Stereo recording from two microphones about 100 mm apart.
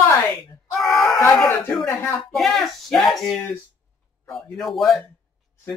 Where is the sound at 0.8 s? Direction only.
Centre (ahead or behind).